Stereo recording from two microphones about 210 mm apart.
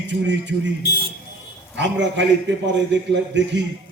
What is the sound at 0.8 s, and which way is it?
Speech, 50° left (ahead or behind).